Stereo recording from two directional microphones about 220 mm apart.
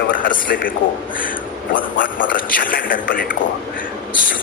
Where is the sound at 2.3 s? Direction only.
40° left (ahead or behind).